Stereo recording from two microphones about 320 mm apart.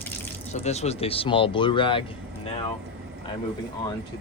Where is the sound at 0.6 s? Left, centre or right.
Centre.